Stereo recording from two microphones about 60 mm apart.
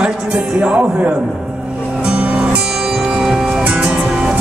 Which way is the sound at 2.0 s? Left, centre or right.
Right.